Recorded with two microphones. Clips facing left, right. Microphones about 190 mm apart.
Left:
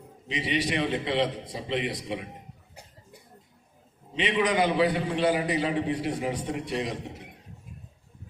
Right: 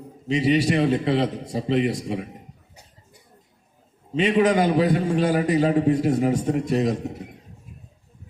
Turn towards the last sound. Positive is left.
turn(degrees=-45)  # may be behind; listen again after turning